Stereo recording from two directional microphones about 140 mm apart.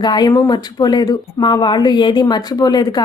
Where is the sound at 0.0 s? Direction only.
30° left (ahead or behind).